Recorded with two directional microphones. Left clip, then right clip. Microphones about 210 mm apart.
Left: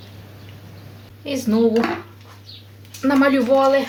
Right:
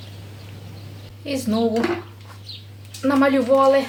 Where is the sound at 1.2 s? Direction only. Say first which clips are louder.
Left 3 dB; 20° left (ahead or behind).